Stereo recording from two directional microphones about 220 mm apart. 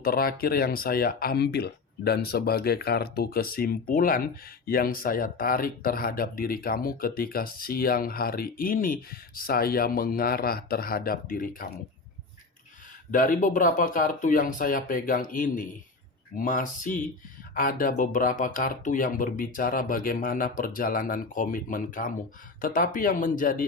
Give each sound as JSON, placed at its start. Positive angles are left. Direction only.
{"t": 0.0, "sound": "speech", "side_deg": 40}
{"t": 13.1, "sound": "speech", "side_deg": 35}